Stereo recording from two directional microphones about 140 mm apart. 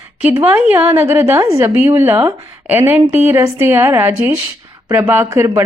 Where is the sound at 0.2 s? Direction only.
10° right (ahead or behind).